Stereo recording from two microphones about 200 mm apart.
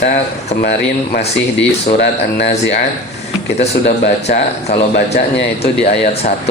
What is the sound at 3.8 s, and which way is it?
Speech, 55° left (ahead or behind).